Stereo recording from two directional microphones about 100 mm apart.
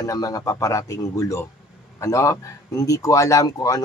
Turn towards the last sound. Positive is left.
turn(degrees=35)  # may be behind; listen again after turning